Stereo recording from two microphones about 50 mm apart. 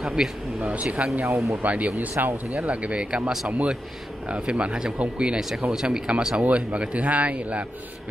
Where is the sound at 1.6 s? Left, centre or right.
Right.